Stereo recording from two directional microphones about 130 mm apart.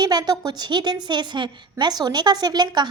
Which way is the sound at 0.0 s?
30° right (ahead or behind).